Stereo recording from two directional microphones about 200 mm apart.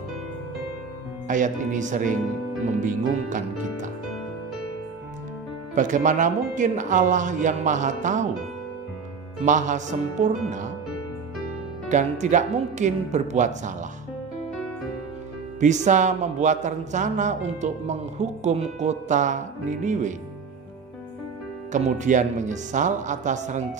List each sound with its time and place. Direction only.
1.2 s a man's voice: 40° right (ahead or behind)
5.8 s a man's voice: 40° right (ahead or behind)
9.4 s a man's voice: 40° right (ahead or behind)
11.9 s a man's voice: 35° right (ahead or behind)
15.6 s a man's voice: 35° right (ahead or behind)
21.7 s a man's voice: 40° right (ahead or behind)